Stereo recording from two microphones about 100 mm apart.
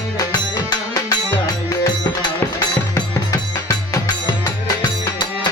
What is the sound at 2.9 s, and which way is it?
Music, 40° left (ahead or behind).